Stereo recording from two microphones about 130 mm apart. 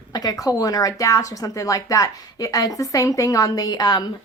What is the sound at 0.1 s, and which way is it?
A woman's voice, 30° left (ahead or behind).